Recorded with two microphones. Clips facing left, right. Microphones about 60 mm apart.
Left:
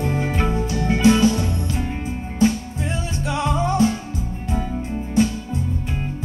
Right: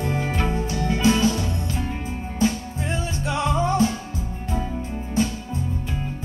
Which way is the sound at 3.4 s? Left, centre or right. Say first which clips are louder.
Even; left.